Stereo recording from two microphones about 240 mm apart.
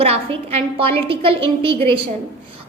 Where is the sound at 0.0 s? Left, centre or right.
Right.